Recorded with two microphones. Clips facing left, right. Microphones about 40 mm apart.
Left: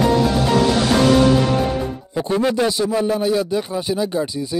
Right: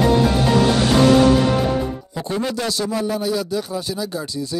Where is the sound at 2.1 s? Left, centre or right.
Centre.